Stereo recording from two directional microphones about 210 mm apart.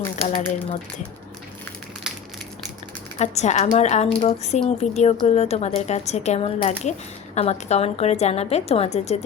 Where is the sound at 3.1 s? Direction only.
30° left (ahead or behind).